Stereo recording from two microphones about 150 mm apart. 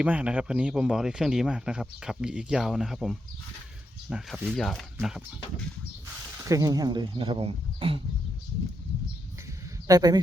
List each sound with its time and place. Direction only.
0.0 s speech: 10° right (ahead or behind)
6.3 s speech: 20° right (ahead or behind); by 8.0 s 40° right (ahead or behind)
9.8 s speech: 25° right (ahead or behind)